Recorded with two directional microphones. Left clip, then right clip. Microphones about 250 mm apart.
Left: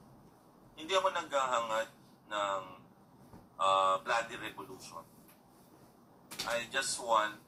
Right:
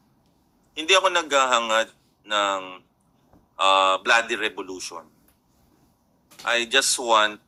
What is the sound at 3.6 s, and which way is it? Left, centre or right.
A woman's voice, right.